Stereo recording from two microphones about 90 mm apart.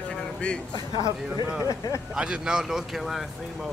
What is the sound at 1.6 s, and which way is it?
Speech, 40° left (ahead or behind).